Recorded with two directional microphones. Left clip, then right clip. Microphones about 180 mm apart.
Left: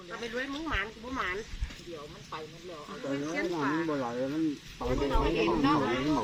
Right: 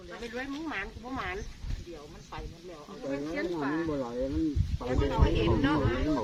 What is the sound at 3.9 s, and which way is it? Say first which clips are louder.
Speech: left 1 dB; 10° left (ahead or behind).